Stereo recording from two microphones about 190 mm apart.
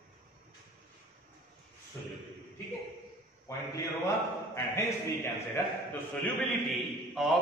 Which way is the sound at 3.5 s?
15° left (ahead or behind).